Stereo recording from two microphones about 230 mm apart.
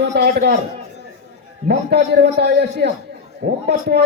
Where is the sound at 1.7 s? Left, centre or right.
Right.